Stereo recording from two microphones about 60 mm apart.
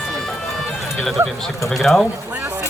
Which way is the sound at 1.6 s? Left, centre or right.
Centre.